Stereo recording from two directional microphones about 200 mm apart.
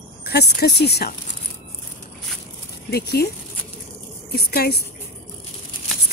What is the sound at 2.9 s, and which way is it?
Speech, 50° left (ahead or behind).